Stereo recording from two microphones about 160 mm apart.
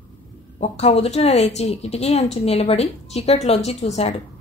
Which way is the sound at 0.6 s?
40° left (ahead or behind).